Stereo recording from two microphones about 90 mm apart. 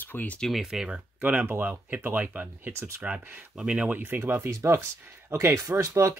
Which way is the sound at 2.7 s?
30° right (ahead or behind).